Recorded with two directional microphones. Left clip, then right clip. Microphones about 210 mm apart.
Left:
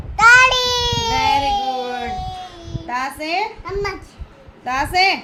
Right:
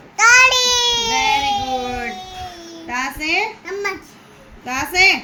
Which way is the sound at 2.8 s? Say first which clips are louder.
Right 1 dB; 20° left (ahead or behind).